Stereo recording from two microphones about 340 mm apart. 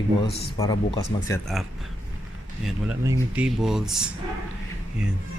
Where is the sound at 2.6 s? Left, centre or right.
Centre.